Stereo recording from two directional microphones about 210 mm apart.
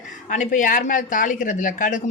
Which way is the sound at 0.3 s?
40° left (ahead or behind).